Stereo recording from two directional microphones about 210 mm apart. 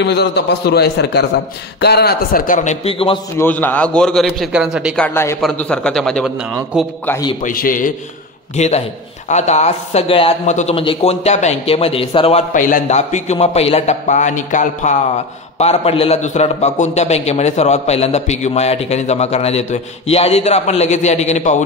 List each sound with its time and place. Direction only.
0.0 s a man's voice: 55° left (ahead or behind); by 3.2 s 25° left (ahead or behind)
3.3 s a man's voice: 10° left (ahead or behind)
5.0 s a man's voice: 10° left (ahead or behind)
7.1 s a man's voice: 20° left (ahead or behind)
7.4 s a man's voice: 40° left (ahead or behind)